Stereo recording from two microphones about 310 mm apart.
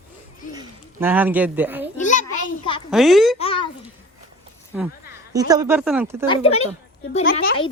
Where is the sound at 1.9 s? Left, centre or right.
Left.